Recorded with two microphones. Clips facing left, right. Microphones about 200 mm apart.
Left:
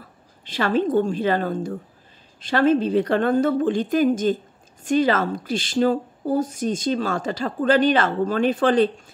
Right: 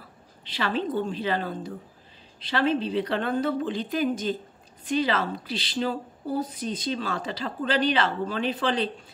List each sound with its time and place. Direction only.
0.5 s a woman's voice: 45° left (ahead or behind)